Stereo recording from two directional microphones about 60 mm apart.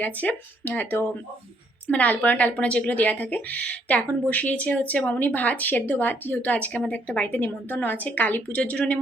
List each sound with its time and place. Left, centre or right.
0.0 s speech: left
8.5 s speech: centre